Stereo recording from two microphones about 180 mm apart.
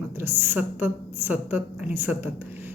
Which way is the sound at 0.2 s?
10° right (ahead or behind).